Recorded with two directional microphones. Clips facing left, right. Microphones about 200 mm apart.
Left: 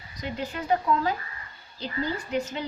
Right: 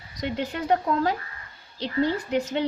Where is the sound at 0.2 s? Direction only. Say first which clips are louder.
Right 4 dB; 80° right.